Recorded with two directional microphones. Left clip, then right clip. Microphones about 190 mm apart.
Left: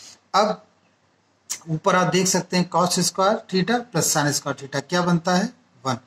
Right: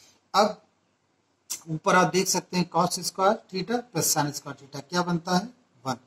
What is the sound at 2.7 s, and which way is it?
Speech, 45° left (ahead or behind).